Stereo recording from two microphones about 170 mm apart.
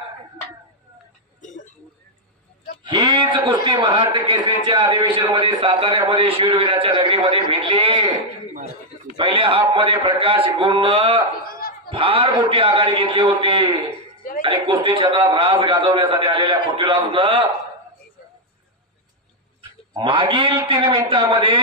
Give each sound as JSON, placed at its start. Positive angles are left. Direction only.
{"t": 1.4, "sound": "a sound", "side_deg": 45}
{"t": 2.8, "sound": "a man's voice", "side_deg": -25}
{"t": 11.4, "sound": "laughter", "side_deg": 60}
{"t": 11.9, "sound": "a man's voice", "side_deg": -30}
{"t": 19.9, "sound": "a man's voice", "side_deg": -30}